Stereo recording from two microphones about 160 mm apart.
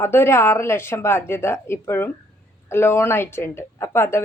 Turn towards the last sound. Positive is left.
turn(degrees=15)  # may be behind; listen again after turning